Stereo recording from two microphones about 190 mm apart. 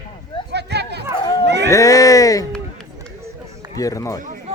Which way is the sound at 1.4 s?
65° right (ahead or behind).